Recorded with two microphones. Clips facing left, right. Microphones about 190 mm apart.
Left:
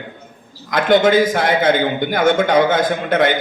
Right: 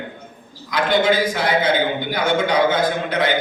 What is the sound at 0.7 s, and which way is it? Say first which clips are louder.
A man's voice: left 4 dB; 50° left (ahead or behind).